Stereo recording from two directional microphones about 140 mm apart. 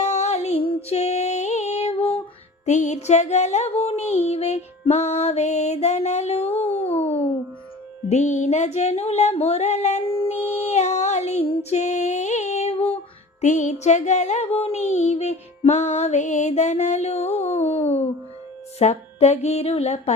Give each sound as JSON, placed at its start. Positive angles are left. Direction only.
{"t": 0.0, "sound": "music", "side_deg": 55}
{"t": 2.6, "sound": "speech", "side_deg": 60}
{"t": 4.3, "sound": "music", "side_deg": 50}
{"t": 10.3, "sound": "music", "side_deg": -15}
{"t": 10.7, "sound": "female singing", "side_deg": 55}
{"t": 11.7, "sound": "music", "side_deg": 55}
{"t": 13.4, "sound": "music", "side_deg": 60}